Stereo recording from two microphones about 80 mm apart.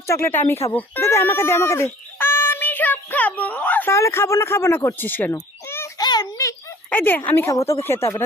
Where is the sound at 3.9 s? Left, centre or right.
Left.